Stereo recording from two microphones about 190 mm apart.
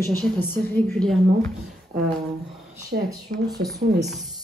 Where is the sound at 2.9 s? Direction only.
60° right (ahead or behind).